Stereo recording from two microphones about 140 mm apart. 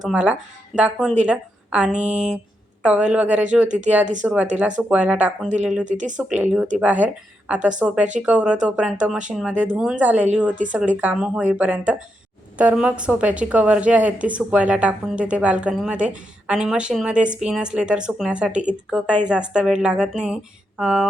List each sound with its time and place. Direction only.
0.0 s a woman's voice: 10° right (ahead or behind)
5.8 s speech: 60° right (ahead or behind)
6.1 s a woman's voice: 10° right (ahead or behind)